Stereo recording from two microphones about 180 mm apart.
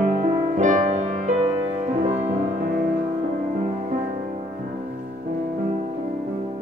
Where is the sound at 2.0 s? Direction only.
35° right (ahead or behind).